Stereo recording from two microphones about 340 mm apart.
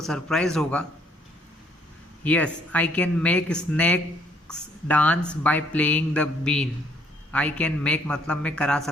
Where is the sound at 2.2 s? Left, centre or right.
Centre.